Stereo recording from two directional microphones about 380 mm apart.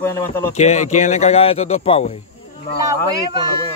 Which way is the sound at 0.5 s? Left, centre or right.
Centre.